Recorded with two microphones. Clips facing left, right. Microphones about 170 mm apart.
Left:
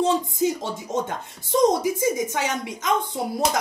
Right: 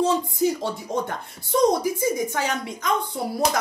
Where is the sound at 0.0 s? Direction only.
20° left (ahead or behind).